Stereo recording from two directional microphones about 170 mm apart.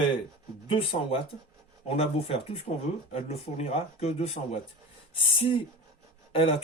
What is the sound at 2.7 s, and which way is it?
Speech, 50° left (ahead or behind).